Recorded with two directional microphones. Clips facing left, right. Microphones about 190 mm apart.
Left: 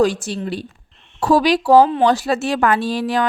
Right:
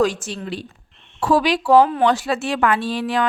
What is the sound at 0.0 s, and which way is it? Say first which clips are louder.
A woman's voice: left 3 dB; 35° left (ahead or behind).